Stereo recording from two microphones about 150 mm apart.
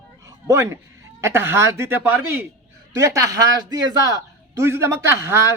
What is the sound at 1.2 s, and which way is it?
A man's voice, 15° right (ahead or behind).